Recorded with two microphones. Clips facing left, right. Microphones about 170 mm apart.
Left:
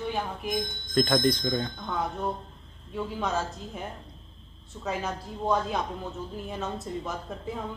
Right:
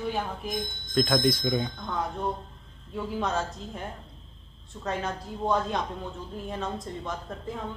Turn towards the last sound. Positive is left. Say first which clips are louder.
# even
turn(degrees=5)  # may be behind; listen again after turning